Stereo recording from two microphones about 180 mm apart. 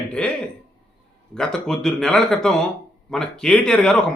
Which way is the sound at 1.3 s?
5° left (ahead or behind).